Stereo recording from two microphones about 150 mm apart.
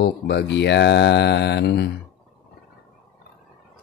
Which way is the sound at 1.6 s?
90° left.